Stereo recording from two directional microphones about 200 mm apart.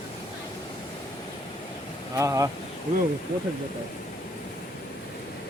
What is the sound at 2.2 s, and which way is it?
Speech, 15° right (ahead or behind).